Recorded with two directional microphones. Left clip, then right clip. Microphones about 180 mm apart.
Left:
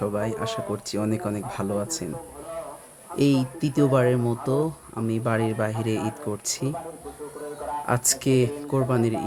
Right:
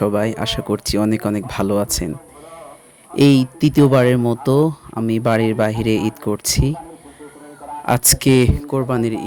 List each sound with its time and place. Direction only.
0.0 s speech: 45° right (ahead or behind)
3.2 s speech: 45° right (ahead or behind)
7.9 s speech: 45° right (ahead or behind)